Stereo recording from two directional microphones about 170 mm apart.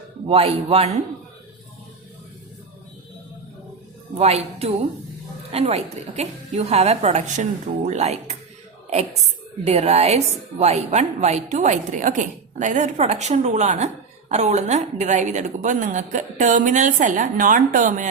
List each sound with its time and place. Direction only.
0.3 s a woman's voice: 35° right (ahead or behind)
4.1 s a woman's voice: 40° right (ahead or behind)
9.6 s a woman's voice: 40° right (ahead or behind)